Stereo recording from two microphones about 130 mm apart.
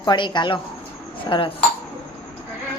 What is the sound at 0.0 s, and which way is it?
Speech, 35° left (ahead or behind).